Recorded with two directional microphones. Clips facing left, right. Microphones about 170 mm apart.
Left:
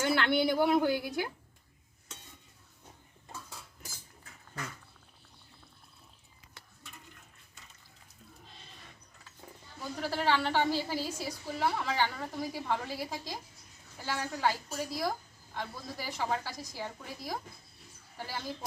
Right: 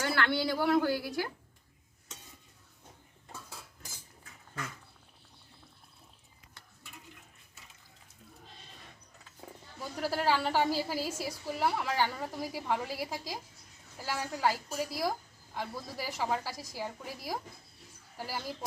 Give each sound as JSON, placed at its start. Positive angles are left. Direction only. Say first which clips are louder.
{"t": 0.0, "sound": "a woman's voice", "louder": "left 3 dB", "side_deg": 20}
{"t": 10.0, "sound": "a woman's voice", "louder": "even", "side_deg": -5}